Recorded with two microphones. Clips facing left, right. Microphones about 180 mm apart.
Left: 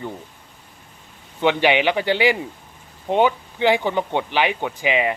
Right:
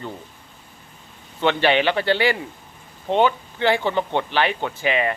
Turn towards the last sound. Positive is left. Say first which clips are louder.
# left 1 dB
turn(degrees=15)  # may be behind; listen again after turning